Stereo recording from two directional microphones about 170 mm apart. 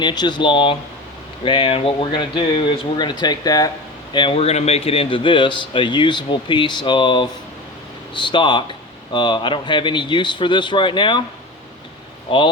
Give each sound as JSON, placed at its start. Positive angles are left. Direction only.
{"t": 0.0, "sound": "a man's voice", "side_deg": 25}
{"t": 12.3, "sound": "a man's voice", "side_deg": 30}